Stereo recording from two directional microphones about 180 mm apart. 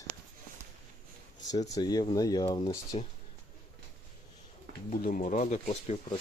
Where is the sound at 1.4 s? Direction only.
20° left (ahead or behind).